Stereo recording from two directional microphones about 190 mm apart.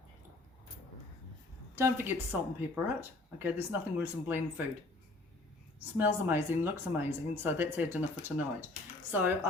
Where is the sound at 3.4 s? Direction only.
10° right (ahead or behind).